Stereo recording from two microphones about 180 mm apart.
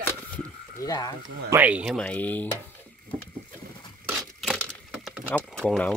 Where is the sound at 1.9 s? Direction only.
5° left (ahead or behind).